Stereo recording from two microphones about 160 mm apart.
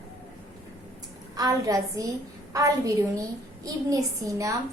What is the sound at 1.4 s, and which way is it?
A woman's voice, 20° right (ahead or behind).